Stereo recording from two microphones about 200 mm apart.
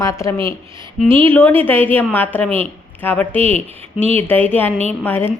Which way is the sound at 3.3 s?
30° right (ahead or behind).